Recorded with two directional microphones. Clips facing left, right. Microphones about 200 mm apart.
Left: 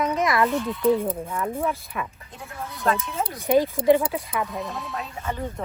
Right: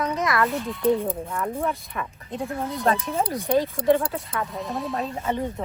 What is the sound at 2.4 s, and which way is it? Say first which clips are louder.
Speech: right 4 dB; 35° right (ahead or behind).